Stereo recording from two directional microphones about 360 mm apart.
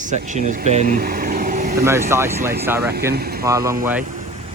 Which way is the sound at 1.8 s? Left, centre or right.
Centre.